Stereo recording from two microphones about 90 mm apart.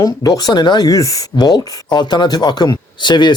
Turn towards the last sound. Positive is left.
turn(degrees=55)  # may be behind; listen again after turning